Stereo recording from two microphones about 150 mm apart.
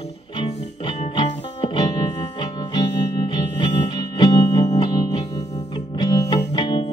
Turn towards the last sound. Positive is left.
turn(degrees=30)  # may be behind; listen again after turning